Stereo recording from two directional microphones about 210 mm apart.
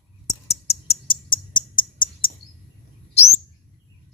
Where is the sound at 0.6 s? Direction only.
30° left (ahead or behind).